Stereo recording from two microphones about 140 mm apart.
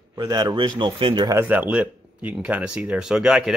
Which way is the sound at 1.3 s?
15° right (ahead or behind).